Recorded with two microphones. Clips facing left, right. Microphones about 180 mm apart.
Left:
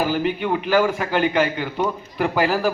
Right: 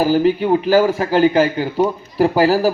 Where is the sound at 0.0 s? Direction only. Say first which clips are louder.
Right 7 dB; 35° right (ahead or behind).